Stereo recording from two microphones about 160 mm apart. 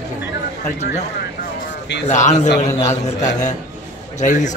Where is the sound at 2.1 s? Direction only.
50° left (ahead or behind).